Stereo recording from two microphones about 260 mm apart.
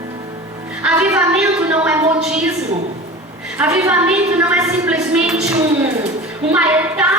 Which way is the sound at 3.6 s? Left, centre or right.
Centre.